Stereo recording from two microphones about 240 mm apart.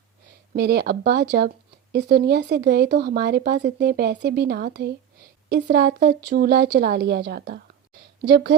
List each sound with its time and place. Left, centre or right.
0.5 s speech: right